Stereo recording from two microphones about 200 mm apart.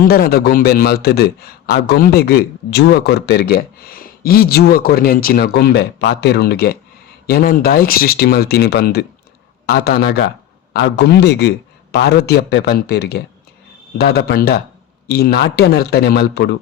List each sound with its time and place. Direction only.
0.0 s a man's voice: 50° left (ahead or behind)